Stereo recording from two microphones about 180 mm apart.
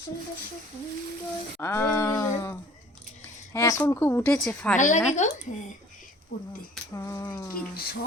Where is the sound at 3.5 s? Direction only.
20° left (ahead or behind).